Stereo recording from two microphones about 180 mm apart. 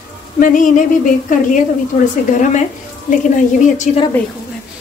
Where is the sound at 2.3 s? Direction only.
45° left (ahead or behind).